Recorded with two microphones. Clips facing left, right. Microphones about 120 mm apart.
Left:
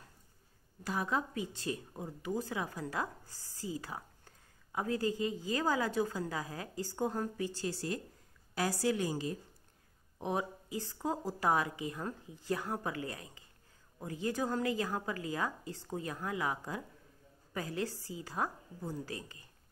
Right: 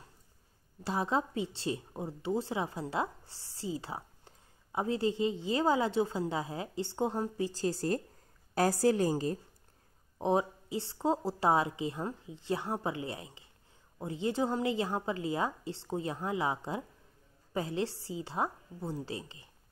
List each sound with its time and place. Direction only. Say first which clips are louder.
0.8 s a woman's voice: right 3 dB; 30° right (ahead or behind)
10.1 s a woman's voice: right 6 dB; 30° right (ahead or behind)